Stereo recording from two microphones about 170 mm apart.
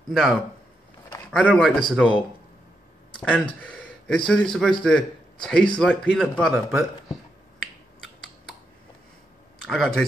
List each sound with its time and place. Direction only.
0.1 s a man's voice: centre (ahead or behind)
3.2 s a man's voice: 5° left (ahead or behind)
7.6 s finger snapping: centre (ahead or behind)
9.7 s a man's voice: centre (ahead or behind)